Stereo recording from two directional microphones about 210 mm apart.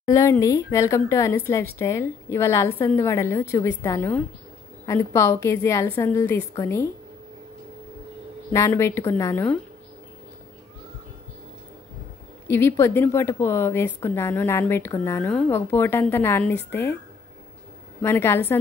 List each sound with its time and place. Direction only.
0.0 s a woman's voice: 15° left (ahead or behind)
8.5 s a woman's voice: 15° left (ahead or behind)
12.4 s a woman's voice: 10° left (ahead or behind)
18.0 s a woman's voice: 10° left (ahead or behind)